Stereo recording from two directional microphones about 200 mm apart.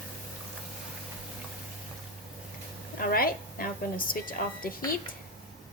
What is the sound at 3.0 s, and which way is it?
A woman's voice, 45° left (ahead or behind).